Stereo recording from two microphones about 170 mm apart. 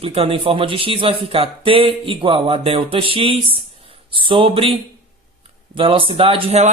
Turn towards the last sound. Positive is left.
turn(degrees=-40)  # may be behind; listen again after turning